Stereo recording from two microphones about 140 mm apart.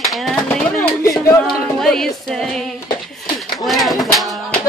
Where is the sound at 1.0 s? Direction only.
20° left (ahead or behind).